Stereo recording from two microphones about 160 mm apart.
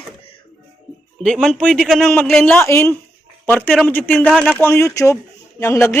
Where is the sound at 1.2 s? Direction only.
Centre (ahead or behind).